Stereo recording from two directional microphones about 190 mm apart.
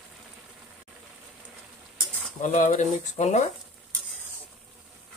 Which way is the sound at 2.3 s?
40° left (ahead or behind).